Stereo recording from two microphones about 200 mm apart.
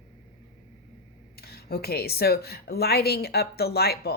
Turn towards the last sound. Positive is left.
turn(degrees=50)  # may be behind; listen again after turning